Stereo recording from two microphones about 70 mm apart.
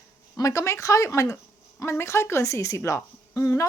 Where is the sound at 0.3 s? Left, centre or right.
Left.